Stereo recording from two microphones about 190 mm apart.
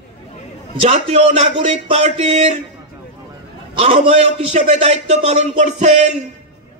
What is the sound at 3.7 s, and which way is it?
A man's voice, 30° right (ahead or behind).